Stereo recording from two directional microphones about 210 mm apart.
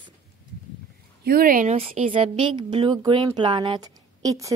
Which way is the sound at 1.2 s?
45° right (ahead or behind).